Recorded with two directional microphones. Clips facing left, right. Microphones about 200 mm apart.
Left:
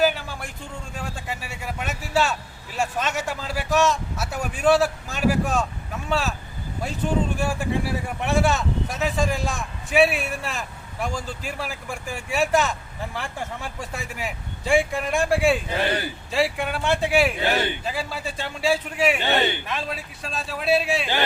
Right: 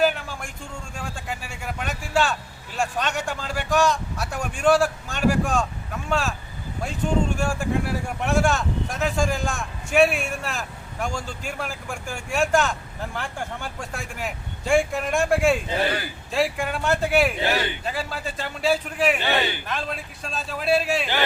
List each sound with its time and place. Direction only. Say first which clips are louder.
0.0 s vehicle: even; centre (ahead or behind)
0.9 s speech: even; 5° left (ahead or behind)
1.5 s vehicle: left 1 dB; 5° left (ahead or behind)
2.7 s speech: even; 5° left (ahead or behind)
19.2 s a man's voice: left 2 dB; 20° left (ahead or behind)
19.6 s speech: even; centre (ahead or behind)